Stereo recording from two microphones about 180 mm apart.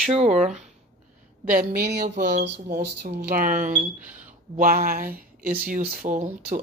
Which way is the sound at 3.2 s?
50° right (ahead or behind).